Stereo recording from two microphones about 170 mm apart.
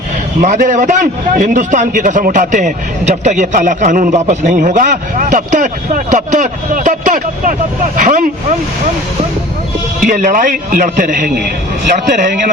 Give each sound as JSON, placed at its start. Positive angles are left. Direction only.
{"t": 0.4, "sound": "a man's voice", "side_deg": -50}
{"t": 10.0, "sound": "a man's voice", "side_deg": -50}